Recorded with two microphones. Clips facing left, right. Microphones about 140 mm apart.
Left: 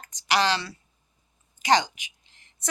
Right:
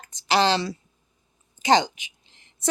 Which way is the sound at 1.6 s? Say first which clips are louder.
Right 2 dB; 25° right (ahead or behind).